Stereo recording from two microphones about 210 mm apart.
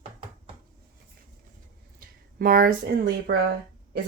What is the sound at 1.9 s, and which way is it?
Speech, 45° right (ahead or behind).